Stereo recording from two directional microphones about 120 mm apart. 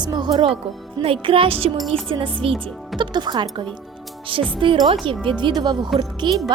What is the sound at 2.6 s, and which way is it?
A woman's voice, 40° right (ahead or behind).